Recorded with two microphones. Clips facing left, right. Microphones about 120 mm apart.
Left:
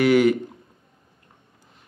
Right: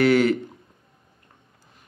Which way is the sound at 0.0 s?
15° left (ahead or behind).